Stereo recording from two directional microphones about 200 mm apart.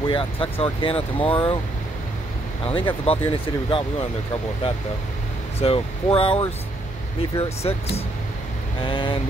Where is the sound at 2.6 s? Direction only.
25° left (ahead or behind).